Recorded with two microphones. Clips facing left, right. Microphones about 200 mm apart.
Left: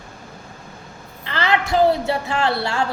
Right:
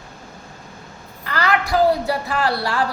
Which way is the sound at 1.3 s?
25° left (ahead or behind).